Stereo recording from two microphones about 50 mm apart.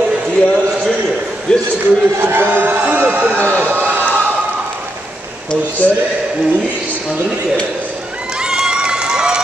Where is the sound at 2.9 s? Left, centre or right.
Right.